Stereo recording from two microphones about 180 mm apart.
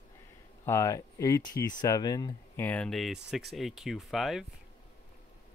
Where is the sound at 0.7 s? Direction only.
15° left (ahead or behind); by 4.5 s centre (ahead or behind).